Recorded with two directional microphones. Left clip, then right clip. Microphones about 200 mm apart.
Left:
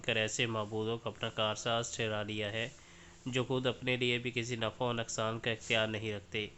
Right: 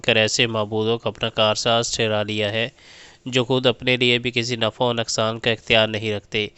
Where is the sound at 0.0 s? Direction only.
45° right (ahead or behind).